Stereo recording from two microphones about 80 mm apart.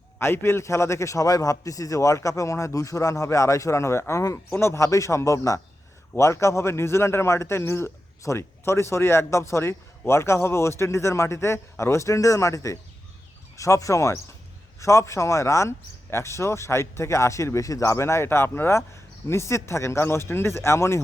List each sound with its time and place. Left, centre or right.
0.2 s speech: left